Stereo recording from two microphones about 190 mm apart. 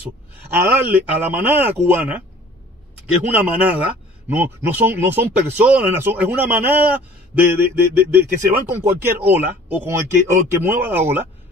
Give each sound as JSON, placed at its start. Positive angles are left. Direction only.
{"t": 0.0, "sound": "speech", "side_deg": -10}
{"t": 3.3, "sound": "speech", "side_deg": -10}